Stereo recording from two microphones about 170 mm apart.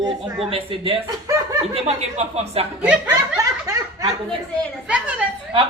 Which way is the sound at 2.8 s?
5° right (ahead or behind).